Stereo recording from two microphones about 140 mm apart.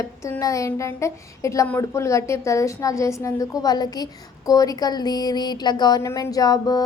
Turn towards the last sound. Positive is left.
turn(degrees=25)  # may be behind; listen again after turning